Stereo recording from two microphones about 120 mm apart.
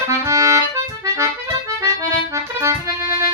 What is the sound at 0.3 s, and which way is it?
Accordion, 25° right (ahead or behind).